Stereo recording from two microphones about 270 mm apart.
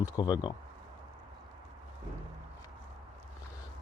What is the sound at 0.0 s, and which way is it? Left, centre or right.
Speech, centre.